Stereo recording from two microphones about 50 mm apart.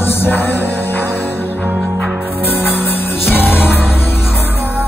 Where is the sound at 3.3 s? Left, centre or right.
Left.